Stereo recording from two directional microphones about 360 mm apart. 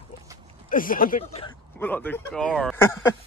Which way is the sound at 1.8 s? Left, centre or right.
Centre.